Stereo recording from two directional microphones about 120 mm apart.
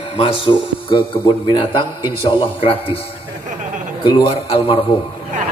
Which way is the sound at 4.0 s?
45° left (ahead or behind).